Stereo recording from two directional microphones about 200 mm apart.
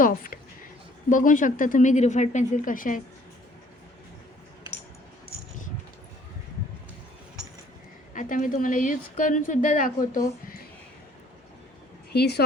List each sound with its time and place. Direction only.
0.0 s a sound: 45° left (ahead or behind)
1.1 s speech: 40° left (ahead or behind)
8.1 s speech: 40° left (ahead or behind)
12.1 s a woman's voice: 55° left (ahead or behind)